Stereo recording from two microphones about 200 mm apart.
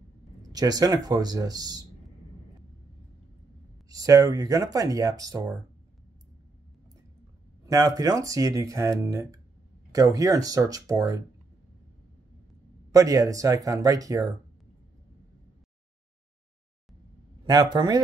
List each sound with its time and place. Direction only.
0.5 s speech: 20° right (ahead or behind)
3.9 s speech: 15° right (ahead or behind)
7.6 s speech: 15° right (ahead or behind)
12.9 s speech: 15° right (ahead or behind)
17.5 s speech: 20° right (ahead or behind)